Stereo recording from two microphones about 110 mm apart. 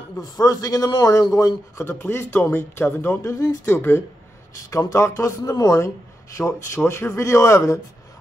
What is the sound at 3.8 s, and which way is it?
Speech, 20° left (ahead or behind).